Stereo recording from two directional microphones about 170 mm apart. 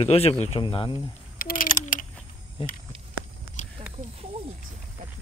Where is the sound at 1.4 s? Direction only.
55° left (ahead or behind).